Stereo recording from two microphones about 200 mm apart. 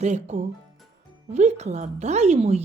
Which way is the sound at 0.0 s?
35° right (ahead or behind).